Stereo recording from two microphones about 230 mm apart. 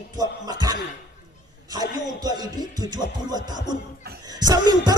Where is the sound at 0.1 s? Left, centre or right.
Centre.